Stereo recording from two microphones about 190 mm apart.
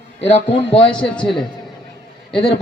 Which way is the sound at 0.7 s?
5° left (ahead or behind).